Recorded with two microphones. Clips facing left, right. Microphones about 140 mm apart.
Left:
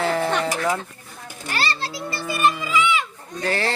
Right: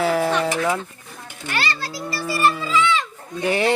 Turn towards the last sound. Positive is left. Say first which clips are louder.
# right 4 dB
turn(degrees=-15)  # may be behind; listen again after turning